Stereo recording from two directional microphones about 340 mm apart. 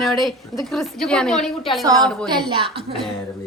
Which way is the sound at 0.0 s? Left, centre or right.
Centre.